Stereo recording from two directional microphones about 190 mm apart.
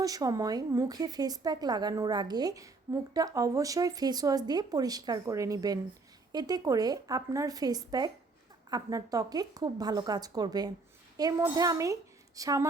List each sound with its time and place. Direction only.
0.0 s a woman's voice: 20° right (ahead or behind)